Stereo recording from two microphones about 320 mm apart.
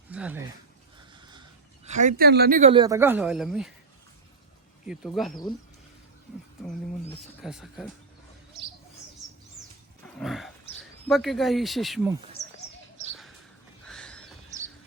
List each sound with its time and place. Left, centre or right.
0.1 s a sound: centre
0.9 s speech: centre
4.9 s speech: centre
7.2 s speech: centre
10.2 s speech: centre
12.4 s a sound: centre
13.8 s horse: centre